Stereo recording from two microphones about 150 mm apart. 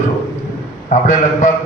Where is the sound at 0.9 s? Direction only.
55° left (ahead or behind).